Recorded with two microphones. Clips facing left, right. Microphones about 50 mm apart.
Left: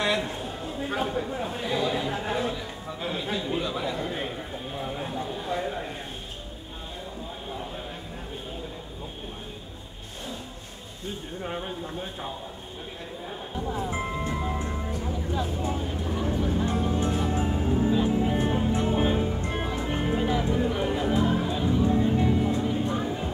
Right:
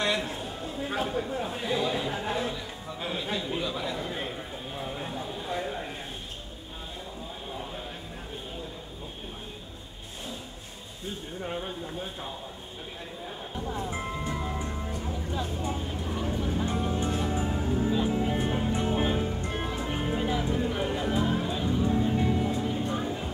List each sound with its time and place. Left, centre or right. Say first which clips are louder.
0.0 s a sound: left 2 dB; centre
11.4 s speech: left 1 dB; centre
13.6 s music: left 3 dB; centre
17.6 s music: left 4 dB; left
17.9 s music: left 3 dB; centre